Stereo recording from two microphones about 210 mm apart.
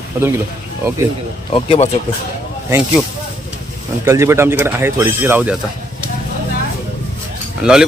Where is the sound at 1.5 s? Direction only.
25° left (ahead or behind).